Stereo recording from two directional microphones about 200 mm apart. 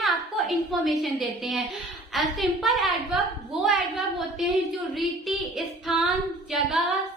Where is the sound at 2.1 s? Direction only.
Centre (ahead or behind).